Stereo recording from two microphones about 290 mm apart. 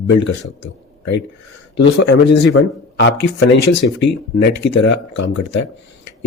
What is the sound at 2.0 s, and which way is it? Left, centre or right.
Speech, left.